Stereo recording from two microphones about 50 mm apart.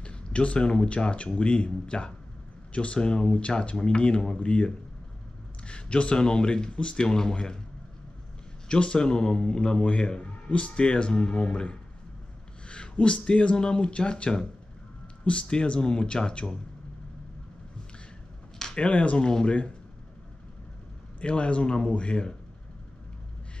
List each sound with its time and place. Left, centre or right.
0.0 s a man's voice: left
8.6 s a man's voice: centre
18.6 s a sound: centre
18.9 s speech: left
21.2 s speech: left